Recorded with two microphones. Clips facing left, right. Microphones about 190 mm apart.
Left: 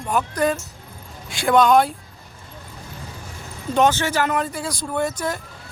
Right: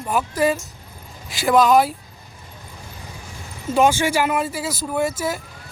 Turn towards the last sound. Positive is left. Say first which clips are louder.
# right 1 dB
turn(degrees=-5)  # may be behind; listen again after turning